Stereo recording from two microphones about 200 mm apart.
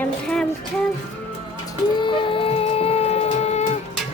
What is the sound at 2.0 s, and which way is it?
Music, 25° left (ahead or behind).